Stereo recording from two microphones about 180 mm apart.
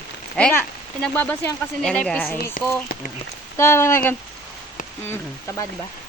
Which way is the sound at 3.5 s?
15° left (ahead or behind).